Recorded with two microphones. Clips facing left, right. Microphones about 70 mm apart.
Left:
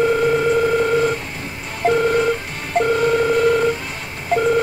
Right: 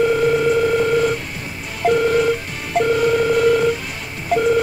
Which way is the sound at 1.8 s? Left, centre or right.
Left.